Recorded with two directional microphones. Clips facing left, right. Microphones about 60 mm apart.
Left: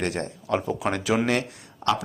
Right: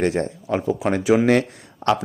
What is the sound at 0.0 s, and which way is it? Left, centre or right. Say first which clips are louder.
Speech: right 7 dB; right.